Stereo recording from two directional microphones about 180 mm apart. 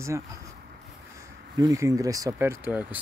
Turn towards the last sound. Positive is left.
turn(degrees=-10)  # may be behind; listen again after turning